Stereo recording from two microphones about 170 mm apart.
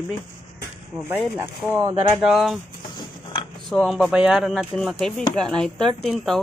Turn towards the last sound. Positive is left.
turn(degrees=0)  # may be behind; listen again after turning